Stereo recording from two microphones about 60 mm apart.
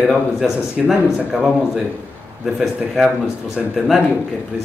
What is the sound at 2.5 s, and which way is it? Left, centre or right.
Speech, centre.